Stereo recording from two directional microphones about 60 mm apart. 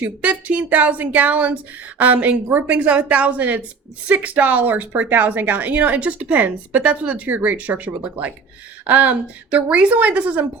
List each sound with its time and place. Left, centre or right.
0.0 s a woman's voice: right